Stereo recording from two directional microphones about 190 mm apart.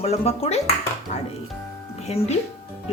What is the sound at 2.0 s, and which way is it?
Speech, 35° left (ahead or behind).